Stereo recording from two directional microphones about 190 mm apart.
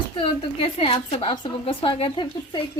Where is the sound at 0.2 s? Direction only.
25° left (ahead or behind).